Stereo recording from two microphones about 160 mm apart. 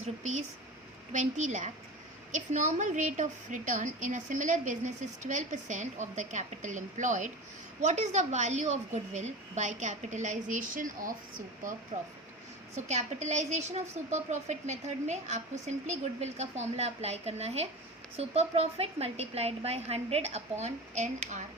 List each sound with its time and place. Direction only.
0.0 s speech: 45° right (ahead or behind)
11.9 s a woman's voice: 40° right (ahead or behind)